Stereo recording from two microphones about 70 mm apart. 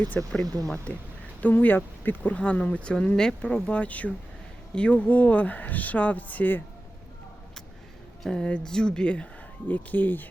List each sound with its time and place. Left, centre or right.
0.4 s speech: right
1.4 s speech: left
8.2 s speech: centre; by 10.2 s left